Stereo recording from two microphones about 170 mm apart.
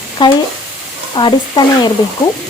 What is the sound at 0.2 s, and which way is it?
Speech, 25° left (ahead or behind).